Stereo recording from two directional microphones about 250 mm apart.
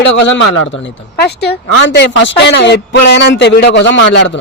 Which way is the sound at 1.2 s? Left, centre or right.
Left.